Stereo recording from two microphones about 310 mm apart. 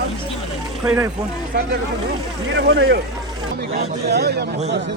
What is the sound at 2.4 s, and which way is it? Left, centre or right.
Speech, right.